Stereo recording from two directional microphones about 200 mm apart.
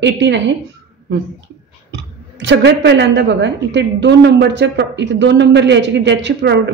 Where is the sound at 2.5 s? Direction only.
60° right (ahead or behind).